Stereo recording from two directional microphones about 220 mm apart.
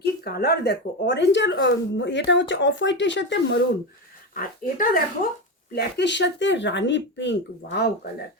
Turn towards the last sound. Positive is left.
turn(degrees=55)  # may be behind; listen again after turning